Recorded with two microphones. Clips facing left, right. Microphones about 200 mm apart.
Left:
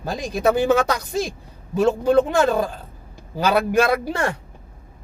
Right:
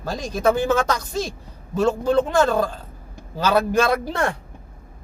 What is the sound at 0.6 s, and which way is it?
Speech, 15° left (ahead or behind).